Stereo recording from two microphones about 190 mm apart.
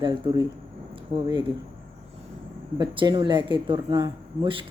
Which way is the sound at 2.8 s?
20° right (ahead or behind).